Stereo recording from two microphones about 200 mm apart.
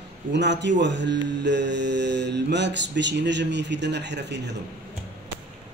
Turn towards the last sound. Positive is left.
turn(degrees=-60)  # may be behind; listen again after turning